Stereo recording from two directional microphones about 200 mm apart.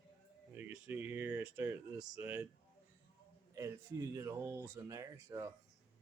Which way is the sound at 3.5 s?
15° right (ahead or behind).